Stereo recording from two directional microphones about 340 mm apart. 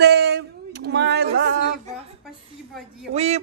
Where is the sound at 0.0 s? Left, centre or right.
Right.